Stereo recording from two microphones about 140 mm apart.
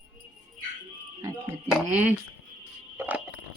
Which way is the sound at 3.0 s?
10° right (ahead or behind).